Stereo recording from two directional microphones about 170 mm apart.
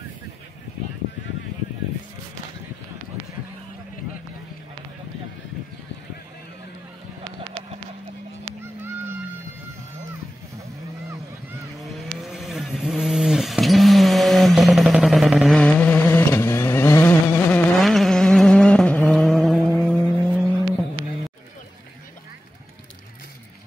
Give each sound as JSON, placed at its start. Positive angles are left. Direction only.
{"t": 11.8, "sound": "vehicle", "side_deg": 0}
{"t": 17.7, "sound": "vehicle", "side_deg": 0}